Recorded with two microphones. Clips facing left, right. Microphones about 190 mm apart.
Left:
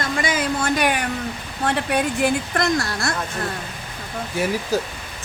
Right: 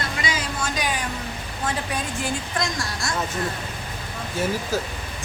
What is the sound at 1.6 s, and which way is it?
A woman's voice, 65° left (ahead or behind).